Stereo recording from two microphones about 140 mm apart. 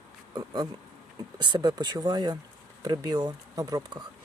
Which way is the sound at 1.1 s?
30° right (ahead or behind).